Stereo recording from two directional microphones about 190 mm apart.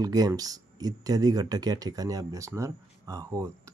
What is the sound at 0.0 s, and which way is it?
Speech, 20° right (ahead or behind).